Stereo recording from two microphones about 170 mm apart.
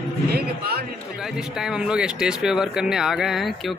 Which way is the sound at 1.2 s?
Centre (ahead or behind).